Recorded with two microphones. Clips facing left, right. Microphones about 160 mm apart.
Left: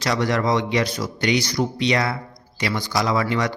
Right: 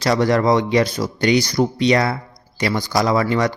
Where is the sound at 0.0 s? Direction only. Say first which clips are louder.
Right 5 dB; 35° right (ahead or behind).